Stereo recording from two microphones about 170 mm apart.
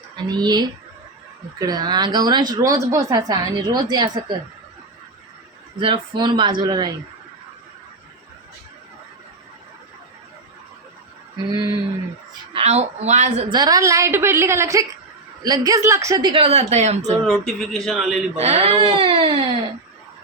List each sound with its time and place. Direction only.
0.2 s speech: 25° right (ahead or behind)
5.8 s speech: 25° right (ahead or behind)
11.5 s a woman's voice: 20° right (ahead or behind)
12.5 s speech: 40° right (ahead or behind)
13.5 s a woman's voice: 25° right (ahead or behind); by 17.2 s 40° right (ahead or behind)
17.2 s speech: 5° left (ahead or behind)
18.3 s speech: 40° right (ahead or behind)